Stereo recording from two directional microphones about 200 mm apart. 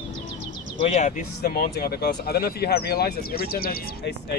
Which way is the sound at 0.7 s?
35° left (ahead or behind).